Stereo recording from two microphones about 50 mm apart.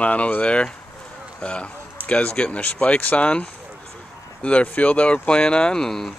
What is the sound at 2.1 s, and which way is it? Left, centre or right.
Speech, left.